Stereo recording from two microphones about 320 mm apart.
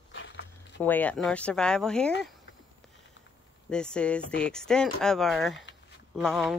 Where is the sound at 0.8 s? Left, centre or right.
Centre.